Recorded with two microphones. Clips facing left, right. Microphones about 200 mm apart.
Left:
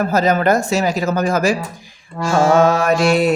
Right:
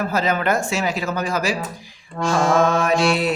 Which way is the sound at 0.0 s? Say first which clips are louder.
Left 6 dB; 40° left (ahead or behind).